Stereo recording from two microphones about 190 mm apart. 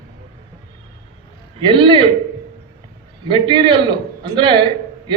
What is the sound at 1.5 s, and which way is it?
Speech, 25° right (ahead or behind).